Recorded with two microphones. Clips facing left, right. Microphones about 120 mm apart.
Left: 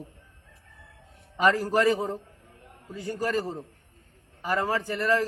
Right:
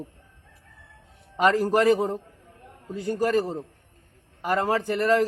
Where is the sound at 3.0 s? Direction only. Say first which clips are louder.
Right 6 dB; 60° right (ahead or behind).